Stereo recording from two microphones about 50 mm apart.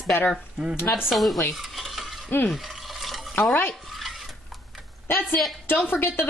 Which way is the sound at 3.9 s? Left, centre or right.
Centre.